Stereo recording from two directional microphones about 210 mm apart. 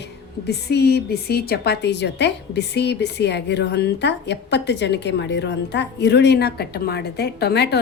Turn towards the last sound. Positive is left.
turn(degrees=50)  # may be behind; listen again after turning